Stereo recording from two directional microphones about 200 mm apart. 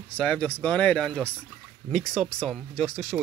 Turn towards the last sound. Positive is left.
turn(degrees=0)  # may be behind; listen again after turning